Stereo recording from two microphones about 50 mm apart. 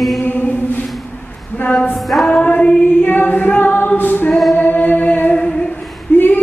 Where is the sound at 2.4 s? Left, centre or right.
Left.